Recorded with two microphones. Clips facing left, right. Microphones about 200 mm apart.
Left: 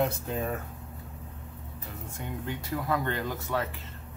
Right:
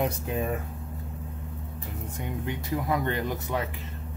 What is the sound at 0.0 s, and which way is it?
Speech, 15° right (ahead or behind).